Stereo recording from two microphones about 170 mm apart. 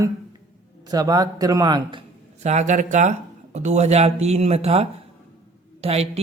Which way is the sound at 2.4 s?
40° right (ahead or behind).